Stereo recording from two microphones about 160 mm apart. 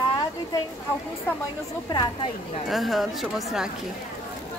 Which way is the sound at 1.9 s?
25° left (ahead or behind).